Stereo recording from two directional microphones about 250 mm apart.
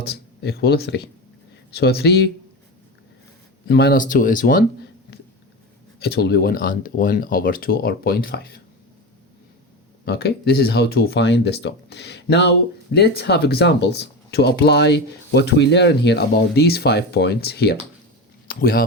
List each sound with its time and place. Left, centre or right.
0.0 s speech: left
3.7 s speech: left
6.0 s speech: left
10.1 s speech: left